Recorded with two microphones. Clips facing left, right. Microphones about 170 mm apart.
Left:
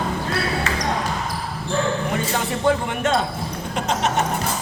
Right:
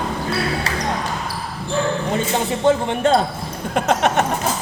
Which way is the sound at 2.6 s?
25° right (ahead or behind).